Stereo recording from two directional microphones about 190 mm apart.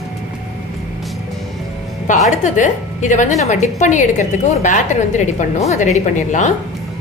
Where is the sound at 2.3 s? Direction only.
40° left (ahead or behind).